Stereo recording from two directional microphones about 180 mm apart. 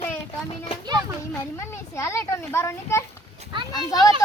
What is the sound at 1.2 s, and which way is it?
A child's voice, 15° left (ahead or behind).